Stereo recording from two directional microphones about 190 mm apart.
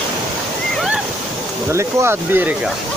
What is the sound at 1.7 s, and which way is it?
Speech, 15° right (ahead or behind).